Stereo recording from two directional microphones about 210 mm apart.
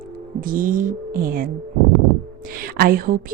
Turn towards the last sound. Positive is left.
turn(degrees=-45)  # may be behind; listen again after turning